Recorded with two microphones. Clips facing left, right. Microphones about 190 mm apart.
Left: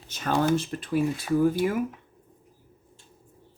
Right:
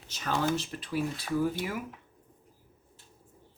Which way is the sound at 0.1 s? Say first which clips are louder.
Left 6 dB; 50° left (ahead or behind).